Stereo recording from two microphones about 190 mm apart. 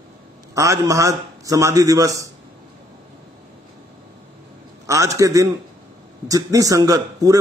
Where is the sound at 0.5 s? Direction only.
15° right (ahead or behind).